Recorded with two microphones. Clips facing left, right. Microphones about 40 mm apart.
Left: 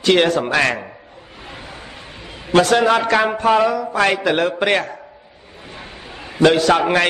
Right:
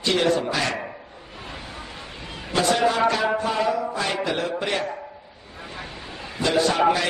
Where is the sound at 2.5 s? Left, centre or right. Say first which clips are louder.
Left 7 dB; left.